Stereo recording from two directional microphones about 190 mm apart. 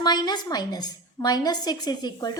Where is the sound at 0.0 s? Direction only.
20° left (ahead or behind).